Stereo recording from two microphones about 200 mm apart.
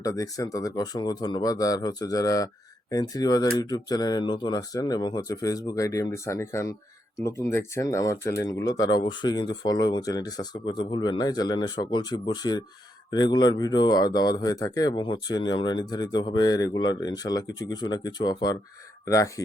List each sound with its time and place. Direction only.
0.0 s speech: 15° left (ahead or behind)